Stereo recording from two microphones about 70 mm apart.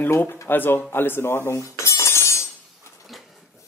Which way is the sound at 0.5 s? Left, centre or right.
Left.